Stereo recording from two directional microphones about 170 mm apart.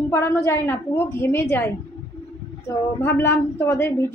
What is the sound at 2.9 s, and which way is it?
A woman's voice, 10° left (ahead or behind).